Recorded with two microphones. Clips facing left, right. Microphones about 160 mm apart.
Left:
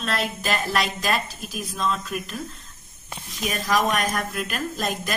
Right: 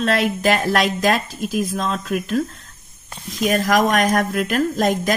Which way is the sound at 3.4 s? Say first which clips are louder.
Right 6 dB; 90° right.